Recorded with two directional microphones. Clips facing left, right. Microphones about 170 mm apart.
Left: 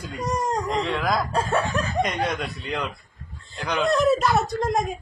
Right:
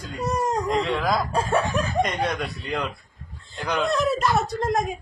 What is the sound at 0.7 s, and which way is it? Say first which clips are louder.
Speech: right 1 dB; 5° right (ahead or behind).